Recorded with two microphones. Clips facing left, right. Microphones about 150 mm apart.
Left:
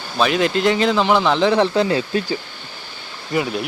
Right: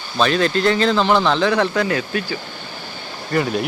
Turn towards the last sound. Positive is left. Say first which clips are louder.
# right 2 dB
turn(degrees=5)  # may be behind; listen again after turning